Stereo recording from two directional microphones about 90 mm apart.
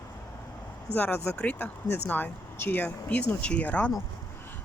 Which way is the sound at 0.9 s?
25° left (ahead or behind).